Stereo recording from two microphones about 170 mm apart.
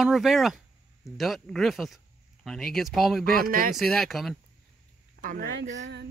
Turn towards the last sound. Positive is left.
turn(degrees=-50)  # may be behind; listen again after turning